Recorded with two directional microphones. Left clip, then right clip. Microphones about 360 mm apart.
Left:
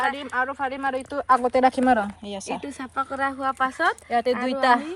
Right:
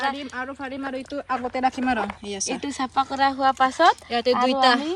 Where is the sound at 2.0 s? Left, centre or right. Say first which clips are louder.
Even; centre.